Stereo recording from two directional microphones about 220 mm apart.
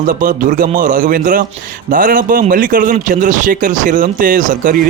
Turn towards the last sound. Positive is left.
turn(degrees=-35)  # may be behind; listen again after turning